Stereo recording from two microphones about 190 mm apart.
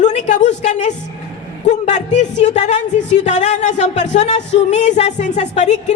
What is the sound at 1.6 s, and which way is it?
A woman's voice, 40° left (ahead or behind).